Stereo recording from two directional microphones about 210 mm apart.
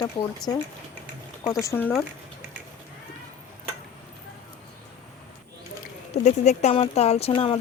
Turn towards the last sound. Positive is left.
turn(degrees=25)  # may be behind; listen again after turning